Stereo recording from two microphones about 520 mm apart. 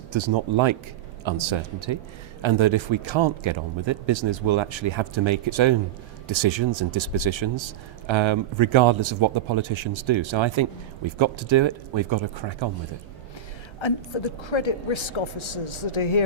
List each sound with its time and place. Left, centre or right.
0.1 s a man's voice: right
13.7 s a woman's voice: left